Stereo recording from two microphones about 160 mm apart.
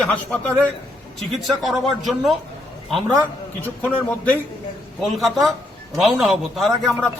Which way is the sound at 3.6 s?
10° left (ahead or behind).